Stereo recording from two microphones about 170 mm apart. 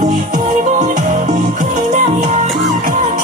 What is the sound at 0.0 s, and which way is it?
Music, 50° right (ahead or behind).